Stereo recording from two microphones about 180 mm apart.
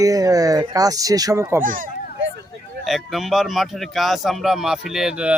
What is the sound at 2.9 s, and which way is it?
Speech, centre (ahead or behind).